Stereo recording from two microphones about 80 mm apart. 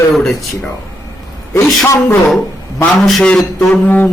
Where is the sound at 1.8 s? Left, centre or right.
Left.